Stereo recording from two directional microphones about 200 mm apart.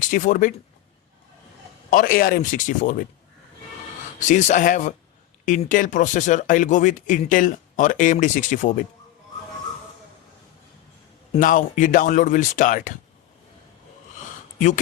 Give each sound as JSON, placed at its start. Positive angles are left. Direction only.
{"t": 0.0, "sound": "speech", "side_deg": 40}
{"t": 1.9, "sound": "speech", "side_deg": 45}
{"t": 4.3, "sound": "speech", "side_deg": 40}
{"t": 11.3, "sound": "speech", "side_deg": 40}